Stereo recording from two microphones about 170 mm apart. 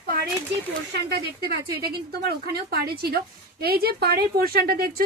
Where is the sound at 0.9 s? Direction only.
70° right (ahead or behind).